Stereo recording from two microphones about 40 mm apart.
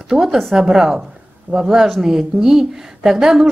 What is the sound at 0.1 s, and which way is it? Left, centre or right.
Speech, centre.